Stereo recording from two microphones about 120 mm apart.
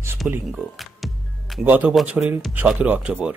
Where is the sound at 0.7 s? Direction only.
Centre (ahead or behind).